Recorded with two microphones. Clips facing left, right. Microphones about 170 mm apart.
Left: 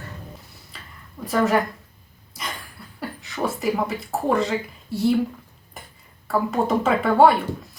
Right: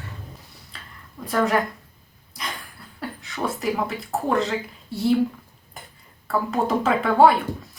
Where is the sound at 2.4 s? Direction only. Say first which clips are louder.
Even; centre (ahead or behind).